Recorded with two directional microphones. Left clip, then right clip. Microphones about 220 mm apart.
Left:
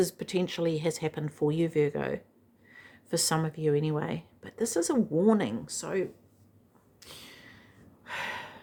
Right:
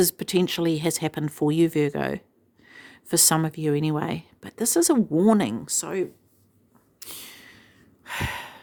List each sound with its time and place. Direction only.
0.0 s speech: 45° right (ahead or behind)
7.0 s gasp: 50° right (ahead or behind)